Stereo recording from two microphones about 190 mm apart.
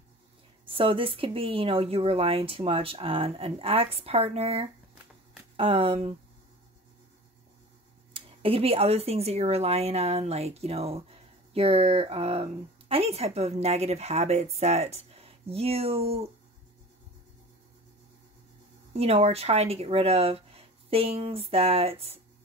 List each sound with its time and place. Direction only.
0.7 s speech: 30° right (ahead or behind)
8.1 s speech: 30° right (ahead or behind)
18.9 s speech: 30° right (ahead or behind)